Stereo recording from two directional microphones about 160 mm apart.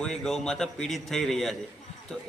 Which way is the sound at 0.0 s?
5° left (ahead or behind).